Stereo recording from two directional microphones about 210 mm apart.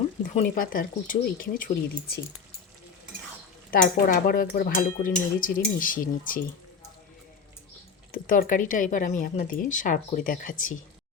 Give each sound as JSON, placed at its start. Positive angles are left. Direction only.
{"t": 0.3, "sound": "speech", "side_deg": 40}
{"t": 3.7, "sound": "speech", "side_deg": 45}
{"t": 8.1, "sound": "speech", "side_deg": 40}